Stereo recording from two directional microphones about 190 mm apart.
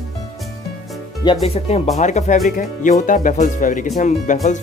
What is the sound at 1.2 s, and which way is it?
Speech, 30° left (ahead or behind).